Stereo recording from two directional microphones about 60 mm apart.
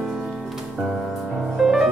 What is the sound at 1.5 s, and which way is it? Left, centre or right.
Music, centre.